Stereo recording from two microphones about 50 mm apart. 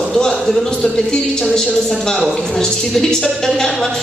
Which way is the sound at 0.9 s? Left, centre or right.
Centre.